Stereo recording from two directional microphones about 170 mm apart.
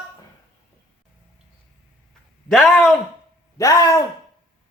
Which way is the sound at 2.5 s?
5° left (ahead or behind).